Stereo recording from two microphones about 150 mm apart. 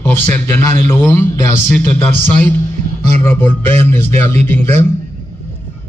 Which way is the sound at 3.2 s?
15° left (ahead or behind).